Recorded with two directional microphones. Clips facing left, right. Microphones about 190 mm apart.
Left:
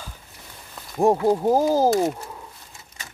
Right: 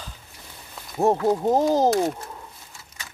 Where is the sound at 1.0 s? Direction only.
10° left (ahead or behind).